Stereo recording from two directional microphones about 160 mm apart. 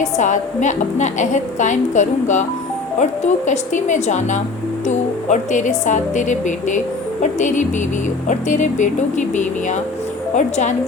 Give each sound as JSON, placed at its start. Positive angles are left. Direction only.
{"t": 0.0, "sound": "speech", "side_deg": 50}